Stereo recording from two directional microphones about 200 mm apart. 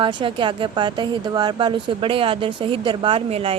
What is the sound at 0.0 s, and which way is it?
Speech, 25° right (ahead or behind).